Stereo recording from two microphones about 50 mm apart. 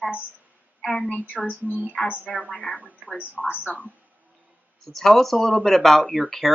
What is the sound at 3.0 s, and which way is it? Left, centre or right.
Speech, right.